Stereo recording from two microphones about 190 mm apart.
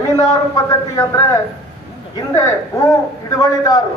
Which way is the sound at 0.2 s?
20° left (ahead or behind).